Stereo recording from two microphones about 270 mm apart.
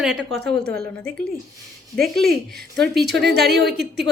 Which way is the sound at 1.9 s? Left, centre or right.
Centre.